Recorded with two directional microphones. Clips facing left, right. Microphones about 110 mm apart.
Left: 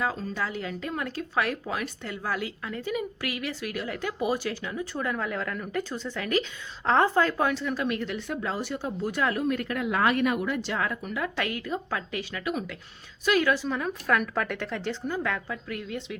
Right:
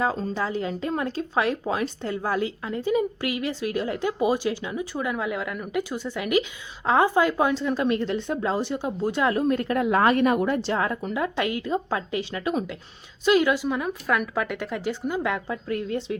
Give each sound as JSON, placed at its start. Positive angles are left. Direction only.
{"t": 0.0, "sound": "a woman's voice", "side_deg": -30}
{"t": 15.6, "sound": "speech", "side_deg": -35}